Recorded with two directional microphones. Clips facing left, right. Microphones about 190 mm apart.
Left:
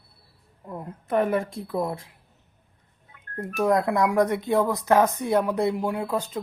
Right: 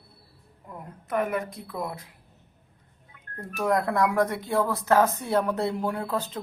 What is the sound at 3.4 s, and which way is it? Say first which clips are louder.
Speech: left 3 dB; 20° left (ahead or behind).